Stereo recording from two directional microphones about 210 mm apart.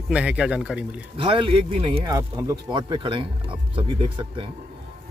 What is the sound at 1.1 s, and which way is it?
Speech, 25° right (ahead or behind).